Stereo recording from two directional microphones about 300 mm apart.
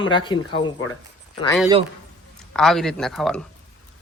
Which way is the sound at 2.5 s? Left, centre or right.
Centre.